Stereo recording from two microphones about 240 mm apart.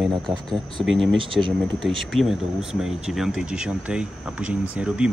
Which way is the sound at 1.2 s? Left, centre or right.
Right.